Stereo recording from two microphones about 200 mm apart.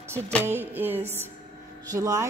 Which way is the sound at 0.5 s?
10° right (ahead or behind).